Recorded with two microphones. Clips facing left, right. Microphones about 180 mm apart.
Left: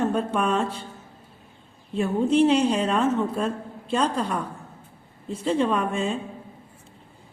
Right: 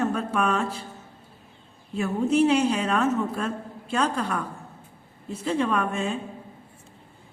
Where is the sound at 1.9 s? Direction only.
30° left (ahead or behind).